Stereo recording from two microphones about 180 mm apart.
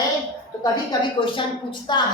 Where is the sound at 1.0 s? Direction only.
25° left (ahead or behind).